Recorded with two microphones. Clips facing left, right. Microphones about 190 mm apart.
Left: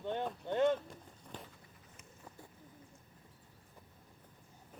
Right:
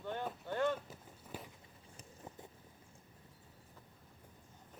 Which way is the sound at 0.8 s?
5° right (ahead or behind).